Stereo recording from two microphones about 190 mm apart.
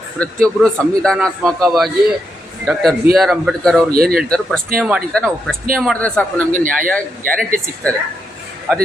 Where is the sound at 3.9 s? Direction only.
50° right (ahead or behind).